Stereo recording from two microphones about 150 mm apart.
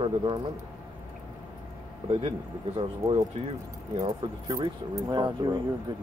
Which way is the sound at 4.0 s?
25° right (ahead or behind).